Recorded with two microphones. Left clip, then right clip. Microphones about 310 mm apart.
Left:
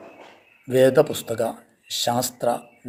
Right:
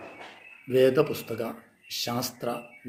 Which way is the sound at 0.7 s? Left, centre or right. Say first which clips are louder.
Left 5 dB; left.